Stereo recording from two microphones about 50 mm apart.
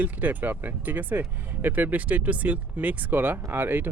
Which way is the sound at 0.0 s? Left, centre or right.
Right.